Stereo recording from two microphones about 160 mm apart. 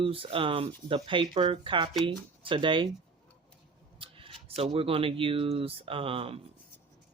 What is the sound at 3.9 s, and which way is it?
Speech, 35° right (ahead or behind).